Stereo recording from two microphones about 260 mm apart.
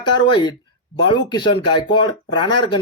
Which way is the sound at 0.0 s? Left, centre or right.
Centre.